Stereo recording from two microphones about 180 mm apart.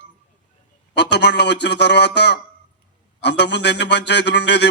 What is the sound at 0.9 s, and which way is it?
Speech, 70° left (ahead or behind).